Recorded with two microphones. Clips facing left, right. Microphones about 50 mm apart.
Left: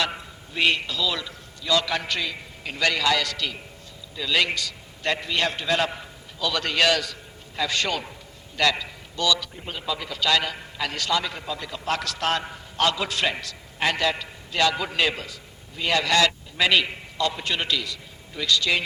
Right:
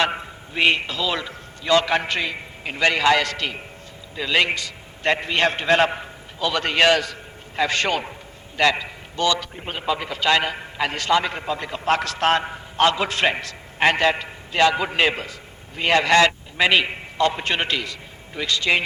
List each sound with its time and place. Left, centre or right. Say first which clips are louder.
0.0 s a man's voice: right 5 dB; right